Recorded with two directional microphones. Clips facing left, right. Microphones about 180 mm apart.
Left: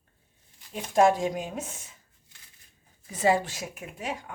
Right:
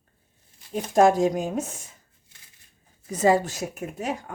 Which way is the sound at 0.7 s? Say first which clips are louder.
Right 3 dB; 45° right (ahead or behind).